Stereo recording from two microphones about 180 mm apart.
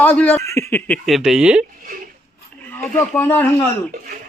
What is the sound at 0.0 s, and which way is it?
Speech, 10° left (ahead or behind).